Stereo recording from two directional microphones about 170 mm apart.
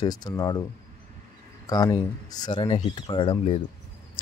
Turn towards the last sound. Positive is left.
turn(degrees=30)  # may be behind; listen again after turning